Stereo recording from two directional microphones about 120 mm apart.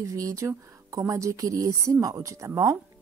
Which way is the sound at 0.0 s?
30° right (ahead or behind).